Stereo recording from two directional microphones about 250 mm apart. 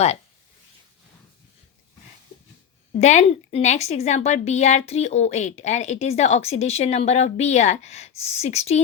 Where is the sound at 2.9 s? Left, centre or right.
Left.